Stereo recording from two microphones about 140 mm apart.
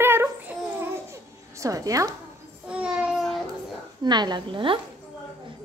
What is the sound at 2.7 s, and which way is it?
Child singing, 5° right (ahead or behind).